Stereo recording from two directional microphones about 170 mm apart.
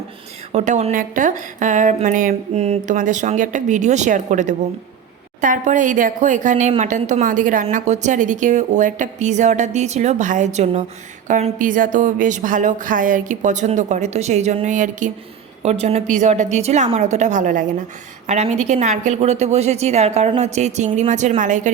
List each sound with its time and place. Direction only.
0.5 s a woman's voice: 45° right (ahead or behind)